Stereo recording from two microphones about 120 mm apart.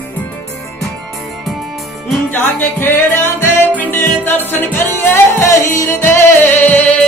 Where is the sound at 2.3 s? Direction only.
15° left (ahead or behind).